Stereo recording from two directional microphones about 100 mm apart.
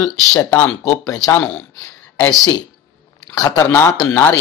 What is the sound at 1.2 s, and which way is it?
Speech, 10° left (ahead or behind).